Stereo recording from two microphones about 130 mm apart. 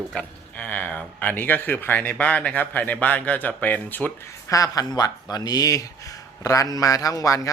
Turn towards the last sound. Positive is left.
turn(degrees=25)  # may be behind; listen again after turning